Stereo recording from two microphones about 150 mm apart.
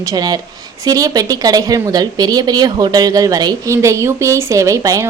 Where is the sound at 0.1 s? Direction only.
25° right (ahead or behind).